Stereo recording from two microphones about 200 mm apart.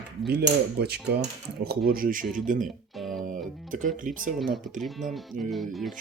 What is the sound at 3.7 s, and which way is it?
Speech, 40° right (ahead or behind).